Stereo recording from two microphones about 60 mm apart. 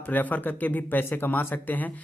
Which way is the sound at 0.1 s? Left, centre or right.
Left.